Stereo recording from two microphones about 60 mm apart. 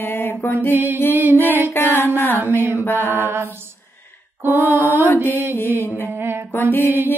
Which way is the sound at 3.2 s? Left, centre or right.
Right.